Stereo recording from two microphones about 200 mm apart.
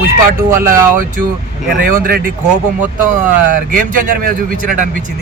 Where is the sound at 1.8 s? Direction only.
45° right (ahead or behind).